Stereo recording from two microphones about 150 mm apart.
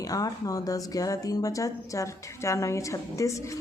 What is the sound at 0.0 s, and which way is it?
A woman's voice, 25° left (ahead or behind).